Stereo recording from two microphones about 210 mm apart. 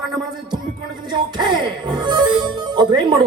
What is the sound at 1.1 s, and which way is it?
Music, 20° right (ahead or behind).